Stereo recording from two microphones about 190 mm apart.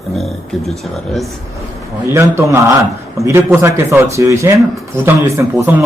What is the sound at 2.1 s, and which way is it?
Speech, 15° right (ahead or behind).